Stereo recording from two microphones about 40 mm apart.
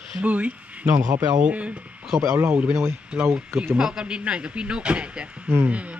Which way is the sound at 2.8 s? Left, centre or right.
Right.